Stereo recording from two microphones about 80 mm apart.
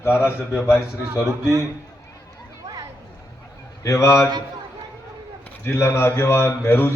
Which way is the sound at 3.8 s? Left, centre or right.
Left.